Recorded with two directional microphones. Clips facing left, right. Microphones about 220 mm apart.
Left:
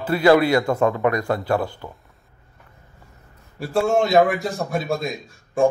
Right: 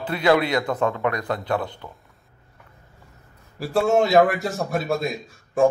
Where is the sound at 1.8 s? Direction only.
15° left (ahead or behind).